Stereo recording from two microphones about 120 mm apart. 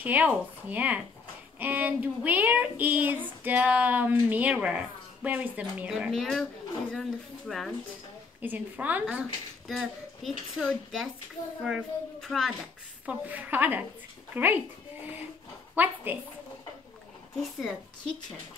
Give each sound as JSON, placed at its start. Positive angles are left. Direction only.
{"t": 0.0, "sound": "a child's voice", "side_deg": -15}
{"t": 8.4, "sound": "speech", "side_deg": -15}
{"t": 9.7, "sound": "a child's voice", "side_deg": 0}
{"t": 13.0, "sound": "speech", "side_deg": -15}
{"t": 15.7, "sound": "a woman's voice", "side_deg": -15}
{"t": 17.4, "sound": "a child's voice", "side_deg": 0}